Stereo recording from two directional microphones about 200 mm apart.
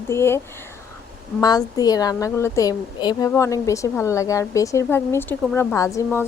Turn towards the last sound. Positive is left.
turn(degrees=15)  # may be behind; listen again after turning